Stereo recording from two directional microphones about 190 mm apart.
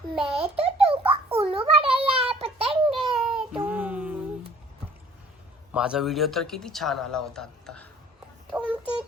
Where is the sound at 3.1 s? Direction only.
Centre (ahead or behind).